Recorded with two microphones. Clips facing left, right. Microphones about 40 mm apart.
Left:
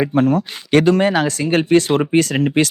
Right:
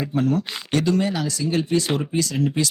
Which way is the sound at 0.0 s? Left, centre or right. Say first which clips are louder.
Left 6 dB; left.